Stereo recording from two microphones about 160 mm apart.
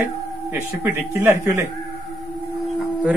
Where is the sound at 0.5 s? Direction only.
15° right (ahead or behind).